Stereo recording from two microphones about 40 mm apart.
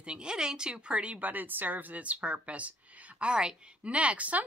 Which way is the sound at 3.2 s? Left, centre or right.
Right.